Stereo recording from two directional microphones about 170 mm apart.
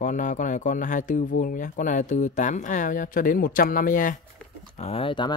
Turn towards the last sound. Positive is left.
turn(degrees=30)  # may be behind; listen again after turning